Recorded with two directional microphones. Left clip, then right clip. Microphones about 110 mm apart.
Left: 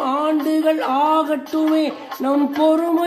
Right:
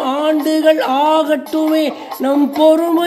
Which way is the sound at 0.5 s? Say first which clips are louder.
Right 5 dB; 5° right (ahead or behind).